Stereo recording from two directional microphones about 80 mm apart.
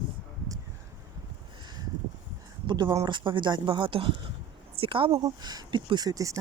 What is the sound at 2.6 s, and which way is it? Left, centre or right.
Speech, right.